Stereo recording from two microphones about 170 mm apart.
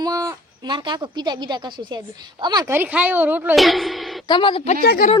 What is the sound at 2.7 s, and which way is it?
Speech, 10° right (ahead or behind).